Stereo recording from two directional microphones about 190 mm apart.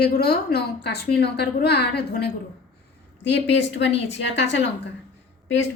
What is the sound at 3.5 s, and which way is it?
A woman's voice, 65° left (ahead or behind).